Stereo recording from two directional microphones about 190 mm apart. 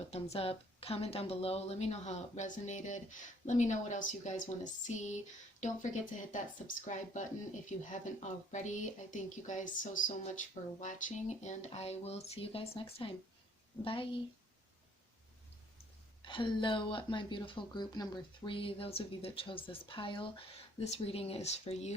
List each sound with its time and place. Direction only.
0.1 s speech: 30° left (ahead or behind)
16.2 s speech: 25° left (ahead or behind)